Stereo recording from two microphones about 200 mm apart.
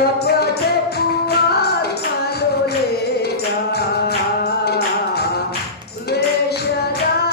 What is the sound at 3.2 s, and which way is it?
Music, 55° left (ahead or behind).